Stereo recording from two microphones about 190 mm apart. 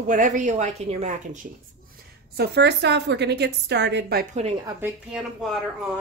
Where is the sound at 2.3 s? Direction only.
60° right (ahead or behind).